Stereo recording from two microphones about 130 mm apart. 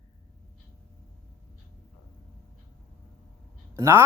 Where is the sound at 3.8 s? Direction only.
20° right (ahead or behind).